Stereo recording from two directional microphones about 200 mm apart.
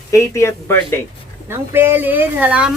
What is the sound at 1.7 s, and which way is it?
Speech, 10° right (ahead or behind).